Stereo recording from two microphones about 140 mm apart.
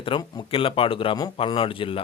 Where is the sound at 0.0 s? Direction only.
35° left (ahead or behind).